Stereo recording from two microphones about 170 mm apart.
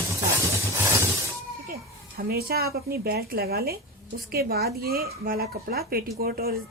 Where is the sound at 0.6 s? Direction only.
15° right (ahead or behind).